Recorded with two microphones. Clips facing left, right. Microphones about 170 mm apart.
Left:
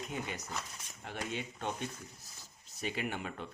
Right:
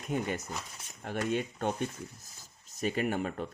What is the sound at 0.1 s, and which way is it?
Speech, 50° right (ahead or behind).